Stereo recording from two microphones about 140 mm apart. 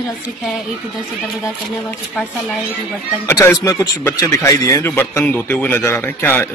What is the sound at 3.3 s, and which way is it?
A man's voice, 25° left (ahead or behind).